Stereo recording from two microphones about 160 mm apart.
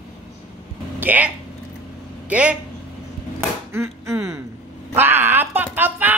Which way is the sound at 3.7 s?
15° right (ahead or behind).